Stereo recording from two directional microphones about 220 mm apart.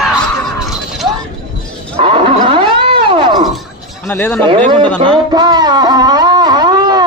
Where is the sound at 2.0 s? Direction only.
25° right (ahead or behind).